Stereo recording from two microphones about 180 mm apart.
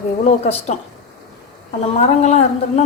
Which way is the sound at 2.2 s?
40° left (ahead or behind).